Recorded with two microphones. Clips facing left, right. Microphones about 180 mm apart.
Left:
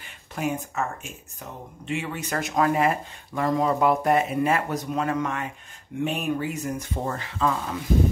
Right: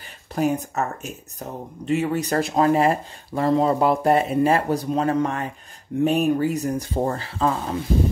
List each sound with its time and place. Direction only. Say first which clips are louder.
0.3 s speech: right 6 dB; 35° right (ahead or behind)